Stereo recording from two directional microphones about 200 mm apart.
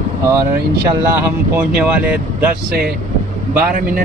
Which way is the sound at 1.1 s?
10° right (ahead or behind).